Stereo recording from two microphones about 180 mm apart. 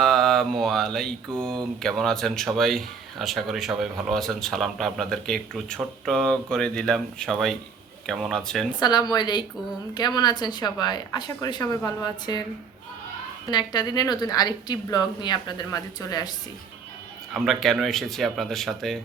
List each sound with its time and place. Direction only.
0.0 s mantra: centre (ahead or behind)
1.8 s speech: centre (ahead or behind)
8.8 s a woman's voice: 25° left (ahead or behind)
13.5 s a woman's voice: 25° left (ahead or behind)
17.3 s speech: centre (ahead or behind)